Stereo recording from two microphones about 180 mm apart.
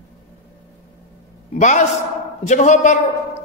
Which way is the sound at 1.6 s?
40° left (ahead or behind).